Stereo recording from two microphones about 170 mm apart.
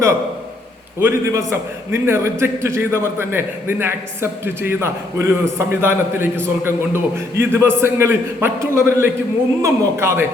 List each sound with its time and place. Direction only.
0.9 s a man's voice: 15° right (ahead or behind)